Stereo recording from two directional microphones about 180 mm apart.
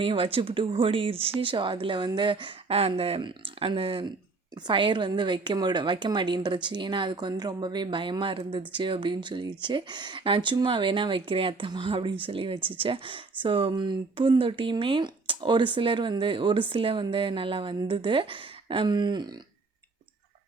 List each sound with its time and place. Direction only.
0.0 s a woman's voice: 30° right (ahead or behind)